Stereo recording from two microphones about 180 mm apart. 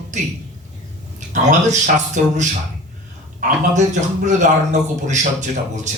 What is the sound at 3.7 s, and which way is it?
A man's voice, 40° right (ahead or behind).